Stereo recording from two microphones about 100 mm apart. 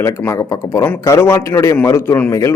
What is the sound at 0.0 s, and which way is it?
Speech, 30° left (ahead or behind).